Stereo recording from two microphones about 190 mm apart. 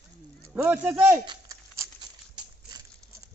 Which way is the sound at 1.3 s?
15° right (ahead or behind).